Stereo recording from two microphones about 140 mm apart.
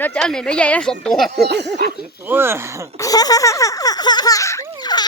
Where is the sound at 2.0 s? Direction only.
15° right (ahead or behind).